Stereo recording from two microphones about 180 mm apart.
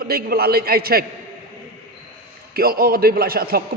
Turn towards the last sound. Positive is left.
turn(degrees=-55)  # may be behind; listen again after turning